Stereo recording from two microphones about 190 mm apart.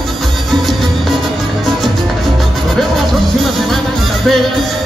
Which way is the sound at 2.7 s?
Centre (ahead or behind).